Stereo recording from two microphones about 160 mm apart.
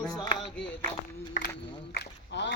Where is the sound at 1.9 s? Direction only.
90° left.